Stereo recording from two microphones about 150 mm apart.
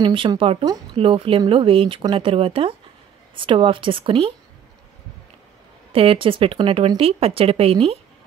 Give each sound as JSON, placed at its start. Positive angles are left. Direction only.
{"t": 0.0, "sound": "speech", "side_deg": -30}
{"t": 5.9, "sound": "speech", "side_deg": -35}